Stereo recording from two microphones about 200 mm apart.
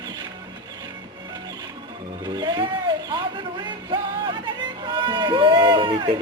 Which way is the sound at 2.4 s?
20° right (ahead or behind).